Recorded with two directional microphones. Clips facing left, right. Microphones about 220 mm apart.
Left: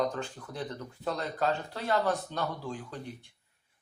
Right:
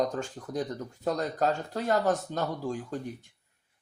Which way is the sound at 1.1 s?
45° right (ahead or behind).